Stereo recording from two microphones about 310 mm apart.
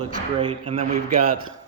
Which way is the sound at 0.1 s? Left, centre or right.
Centre.